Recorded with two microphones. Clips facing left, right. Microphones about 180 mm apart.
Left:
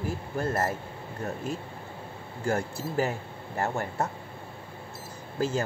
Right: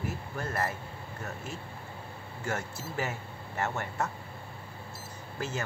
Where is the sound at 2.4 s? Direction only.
35° left (ahead or behind).